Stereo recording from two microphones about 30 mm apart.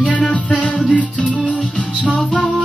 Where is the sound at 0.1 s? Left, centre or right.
Left.